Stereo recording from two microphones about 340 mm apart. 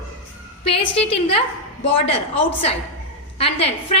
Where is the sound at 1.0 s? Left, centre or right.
Centre.